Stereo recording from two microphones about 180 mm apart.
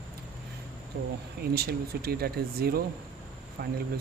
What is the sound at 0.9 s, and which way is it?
Speech, 60° right (ahead or behind).